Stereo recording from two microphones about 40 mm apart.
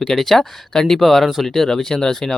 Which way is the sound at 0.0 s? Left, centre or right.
Centre.